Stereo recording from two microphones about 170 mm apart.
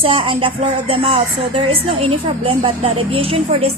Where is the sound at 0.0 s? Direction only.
30° right (ahead or behind).